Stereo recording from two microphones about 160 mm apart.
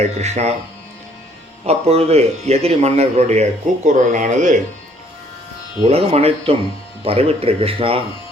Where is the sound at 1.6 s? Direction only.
40° right (ahead or behind).